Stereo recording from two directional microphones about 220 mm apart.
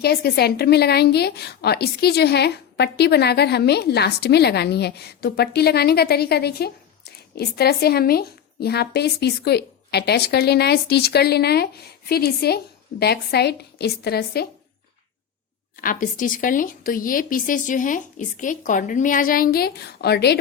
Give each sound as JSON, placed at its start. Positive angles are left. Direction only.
{"t": 0.0, "sound": "a woman's voice", "side_deg": 45}
{"t": 15.7, "sound": "a woman's voice", "side_deg": 40}